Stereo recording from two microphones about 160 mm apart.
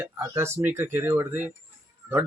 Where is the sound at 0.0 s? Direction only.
15° right (ahead or behind).